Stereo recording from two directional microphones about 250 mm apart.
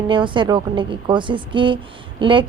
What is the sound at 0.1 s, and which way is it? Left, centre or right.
A woman's voice, centre.